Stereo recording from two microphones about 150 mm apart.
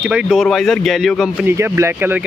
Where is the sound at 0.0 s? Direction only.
5° right (ahead or behind).